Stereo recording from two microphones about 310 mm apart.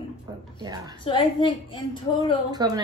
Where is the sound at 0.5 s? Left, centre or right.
Centre.